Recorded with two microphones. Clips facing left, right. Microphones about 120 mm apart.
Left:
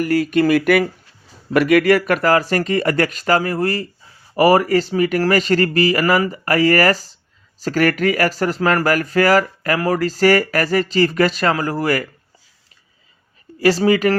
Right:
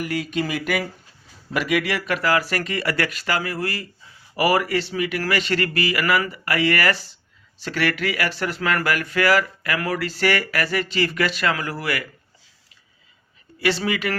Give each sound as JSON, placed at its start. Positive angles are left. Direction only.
{"t": 0.0, "sound": "speech", "side_deg": 50}
{"t": 13.6, "sound": "speech", "side_deg": 40}